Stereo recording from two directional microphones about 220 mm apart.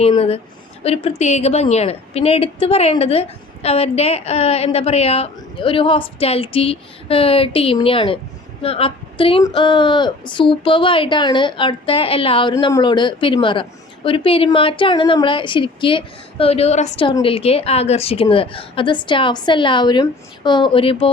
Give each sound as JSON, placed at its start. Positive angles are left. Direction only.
{"t": 0.0, "sound": "speech", "side_deg": 25}